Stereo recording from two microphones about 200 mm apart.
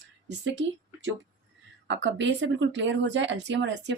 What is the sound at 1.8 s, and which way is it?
Speech, 65° right (ahead or behind).